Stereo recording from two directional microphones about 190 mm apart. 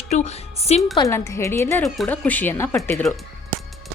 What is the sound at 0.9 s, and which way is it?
Speech, 15° left (ahead or behind).